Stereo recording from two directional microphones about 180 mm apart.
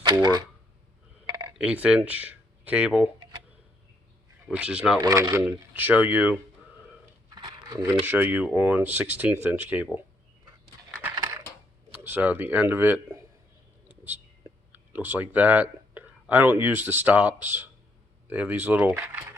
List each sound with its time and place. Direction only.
0.0 s speech: 25° right (ahead or behind)
1.3 s a sound: 25° right (ahead or behind)
1.5 s speech: 5° right (ahead or behind)
4.4 s speech: 5° right (ahead or behind)
4.9 s speech: 20° right (ahead or behind)
7.3 s a sound: 25° right (ahead or behind)
8.0 s speech: 10° right (ahead or behind)
11.1 s coin: 20° right (ahead or behind)
12.0 s speech: 10° right (ahead or behind)
13.8 s whispering: 10° right (ahead or behind)
14.7 s speech: 10° right (ahead or behind)